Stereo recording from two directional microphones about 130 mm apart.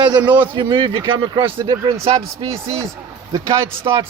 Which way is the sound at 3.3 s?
25° right (ahead or behind).